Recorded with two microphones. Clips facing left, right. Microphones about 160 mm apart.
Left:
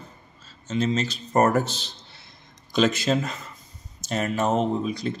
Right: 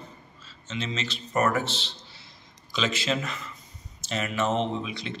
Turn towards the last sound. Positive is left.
turn(degrees=40)  # may be behind; listen again after turning